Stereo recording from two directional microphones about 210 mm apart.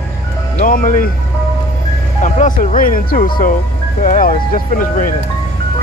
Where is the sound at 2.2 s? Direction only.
35° left (ahead or behind).